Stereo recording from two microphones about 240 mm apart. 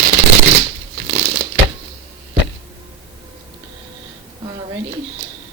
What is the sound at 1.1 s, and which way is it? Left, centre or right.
Crumpling, right.